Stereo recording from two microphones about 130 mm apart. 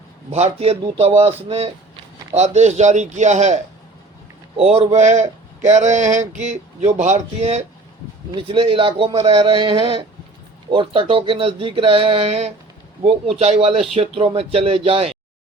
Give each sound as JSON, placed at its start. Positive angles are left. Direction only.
{"t": 0.3, "sound": "speech", "side_deg": -55}
{"t": 4.5, "sound": "speech", "side_deg": -50}
{"t": 8.3, "sound": "music", "side_deg": -40}
{"t": 10.7, "sound": "speech", "side_deg": -40}